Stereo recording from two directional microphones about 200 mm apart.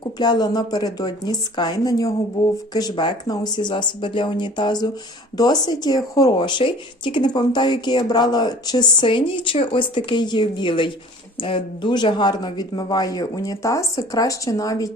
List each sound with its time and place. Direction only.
0.2 s speech: 20° left (ahead or behind)